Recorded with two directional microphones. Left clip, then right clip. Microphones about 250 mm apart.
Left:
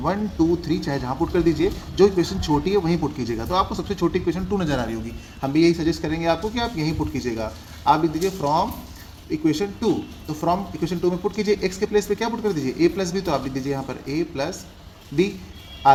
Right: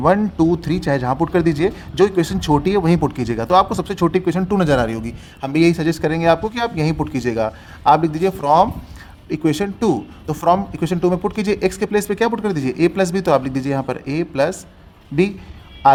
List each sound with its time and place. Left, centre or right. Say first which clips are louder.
0.0 s speech: right 7 dB; right